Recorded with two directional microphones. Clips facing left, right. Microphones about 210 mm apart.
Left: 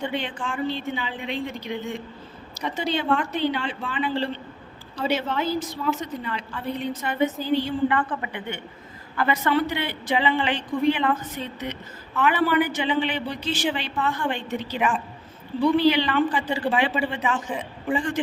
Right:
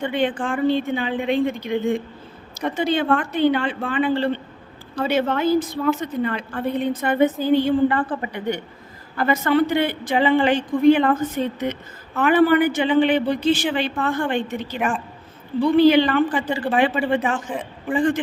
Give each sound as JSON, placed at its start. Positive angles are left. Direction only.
{"t": 0.0, "sound": "a woman's voice", "side_deg": -55}
{"t": 7.9, "sound": "a woman's voice", "side_deg": -35}